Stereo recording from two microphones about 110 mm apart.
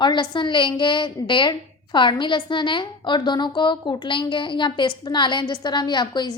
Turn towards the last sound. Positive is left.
turn(degrees=45)  # may be behind; listen again after turning